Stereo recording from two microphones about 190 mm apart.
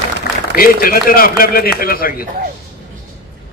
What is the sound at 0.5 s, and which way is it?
A man's voice, 50° left (ahead or behind).